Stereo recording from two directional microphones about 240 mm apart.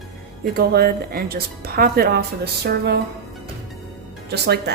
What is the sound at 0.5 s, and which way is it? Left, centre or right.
A woman's voice, right.